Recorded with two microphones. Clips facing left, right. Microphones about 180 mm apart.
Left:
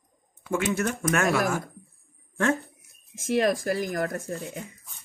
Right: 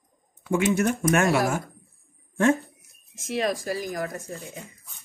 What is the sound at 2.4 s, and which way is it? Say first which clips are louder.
Speech: right 4 dB; 20° right (ahead or behind).